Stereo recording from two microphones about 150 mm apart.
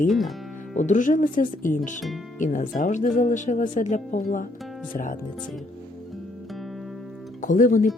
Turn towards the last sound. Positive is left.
turn(degrees=60)  # may be behind; listen again after turning